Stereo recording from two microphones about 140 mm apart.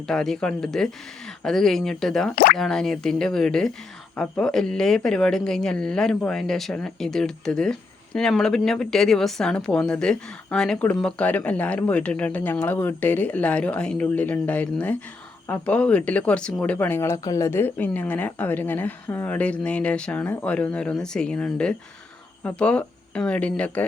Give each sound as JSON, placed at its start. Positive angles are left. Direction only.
{"t": 0.1, "sound": "speech", "side_deg": 5}
{"t": 2.3, "sound": "speech", "side_deg": 90}
{"t": 2.6, "sound": "speech", "side_deg": 5}